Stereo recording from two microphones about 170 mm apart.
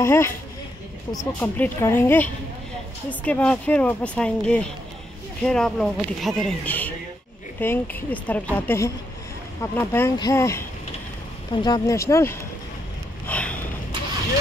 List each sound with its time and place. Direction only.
0.0 s speech: 15° left (ahead or behind)
1.4 s speech: 15° left (ahead or behind)
11.6 s speech: 20° left (ahead or behind)
13.3 s sniff: 10° left (ahead or behind)